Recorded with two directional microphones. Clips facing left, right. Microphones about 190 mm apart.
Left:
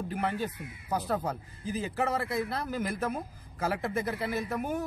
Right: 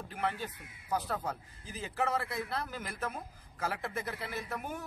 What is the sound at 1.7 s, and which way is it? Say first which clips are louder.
A man's voice: left 4 dB; 10° left (ahead or behind).